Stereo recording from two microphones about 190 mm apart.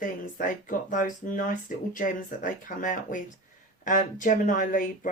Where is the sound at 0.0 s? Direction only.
45° left (ahead or behind).